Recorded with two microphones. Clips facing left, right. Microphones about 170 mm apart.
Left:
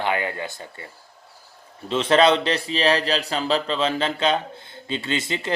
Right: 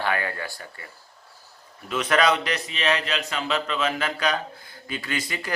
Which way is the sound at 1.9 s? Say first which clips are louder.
Left 4 dB; 30° left (ahead or behind).